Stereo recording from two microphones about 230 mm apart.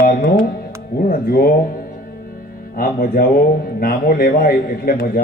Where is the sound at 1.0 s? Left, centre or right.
Left.